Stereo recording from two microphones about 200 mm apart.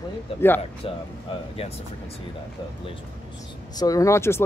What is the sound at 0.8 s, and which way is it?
Speech, 30° left (ahead or behind).